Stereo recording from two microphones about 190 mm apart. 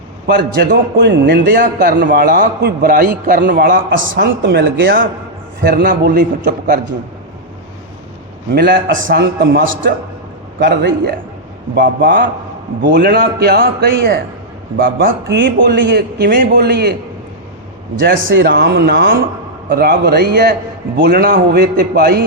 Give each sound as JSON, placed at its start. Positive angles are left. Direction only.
{"t": 0.3, "sound": "a man's voice", "side_deg": -60}
{"t": 1.6, "sound": "a man's voice", "side_deg": -50}
{"t": 4.2, "sound": "a man's voice", "side_deg": -60}
{"t": 8.5, "sound": "a man's voice", "side_deg": -60}
{"t": 10.6, "sound": "a man's voice", "side_deg": -65}
{"t": 15.4, "sound": "a man's voice", "side_deg": -70}
{"t": 18.0, "sound": "a man's voice", "side_deg": -65}